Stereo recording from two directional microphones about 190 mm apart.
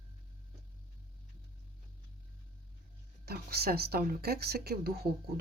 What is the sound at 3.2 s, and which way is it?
Speech, 55° right (ahead or behind).